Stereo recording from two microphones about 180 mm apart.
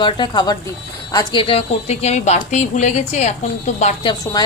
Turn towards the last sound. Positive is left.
turn(degrees=20)  # may be behind; listen again after turning